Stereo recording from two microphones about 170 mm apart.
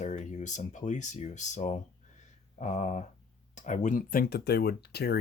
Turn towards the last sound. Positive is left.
turn(degrees=70)  # may be behind; listen again after turning